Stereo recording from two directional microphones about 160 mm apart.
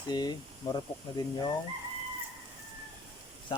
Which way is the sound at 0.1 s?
25° left (ahead or behind).